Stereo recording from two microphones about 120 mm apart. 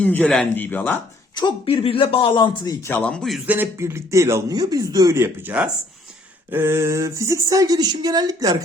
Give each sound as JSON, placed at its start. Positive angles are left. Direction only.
{"t": 0.0, "sound": "speech", "side_deg": 15}
{"t": 1.4, "sound": "speech", "side_deg": 40}
{"t": 3.0, "sound": "a man's voice", "side_deg": 5}
{"t": 3.4, "sound": "speech", "side_deg": -15}
{"t": 3.8, "sound": "speech", "side_deg": -25}